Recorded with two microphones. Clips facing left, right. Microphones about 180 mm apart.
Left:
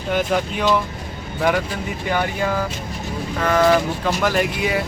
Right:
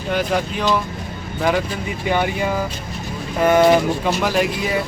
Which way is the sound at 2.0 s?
10° right (ahead or behind).